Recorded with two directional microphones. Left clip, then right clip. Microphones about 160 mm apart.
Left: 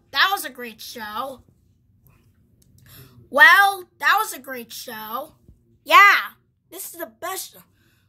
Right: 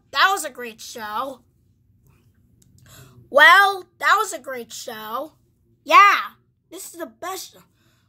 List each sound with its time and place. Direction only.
0.1 s a woman's voice: 20° right (ahead or behind)
2.6 s speech: 20° right (ahead or behind)
5.9 s a woman's voice: 10° right (ahead or behind)